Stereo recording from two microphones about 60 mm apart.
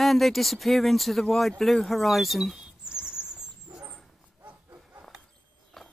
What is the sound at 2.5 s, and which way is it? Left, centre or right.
Rodents, centre.